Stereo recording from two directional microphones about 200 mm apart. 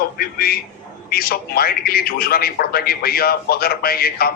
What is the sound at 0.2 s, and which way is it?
A man's voice, 50° left (ahead or behind).